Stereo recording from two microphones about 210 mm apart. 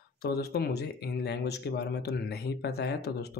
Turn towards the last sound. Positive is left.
turn(degrees=50)  # may be behind; listen again after turning